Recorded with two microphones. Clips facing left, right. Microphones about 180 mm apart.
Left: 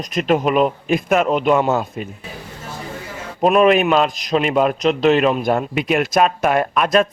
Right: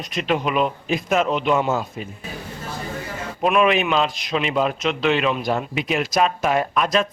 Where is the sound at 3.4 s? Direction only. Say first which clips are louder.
Left 5 dB; 40° left (ahead or behind).